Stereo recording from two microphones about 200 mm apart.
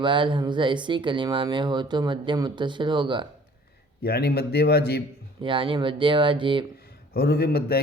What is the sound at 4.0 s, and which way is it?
A man's voice, 50° left (ahead or behind).